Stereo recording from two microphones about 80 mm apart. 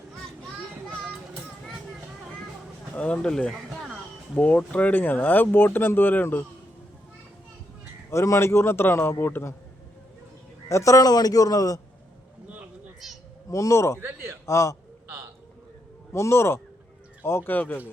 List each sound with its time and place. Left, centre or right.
2.9 s speech: centre
8.1 s a man's voice: left
10.7 s a man's voice: left
13.5 s a man's voice: left
14.0 s a man's voice: right
14.4 s a man's voice: left
16.1 s a man's voice: left